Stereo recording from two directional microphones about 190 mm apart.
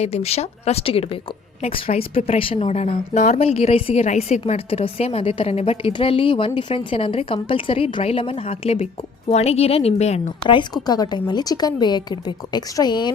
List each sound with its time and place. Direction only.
0.0 s a woman's voice: 35° left (ahead or behind)